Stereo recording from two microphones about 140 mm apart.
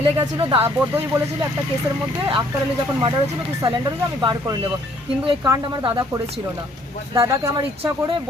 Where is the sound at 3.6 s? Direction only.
30° right (ahead or behind).